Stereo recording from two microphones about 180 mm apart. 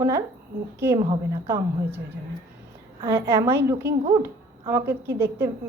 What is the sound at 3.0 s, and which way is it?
A woman's voice, 15° right (ahead or behind).